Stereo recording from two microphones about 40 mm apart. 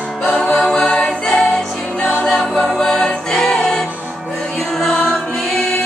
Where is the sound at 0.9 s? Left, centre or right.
Centre.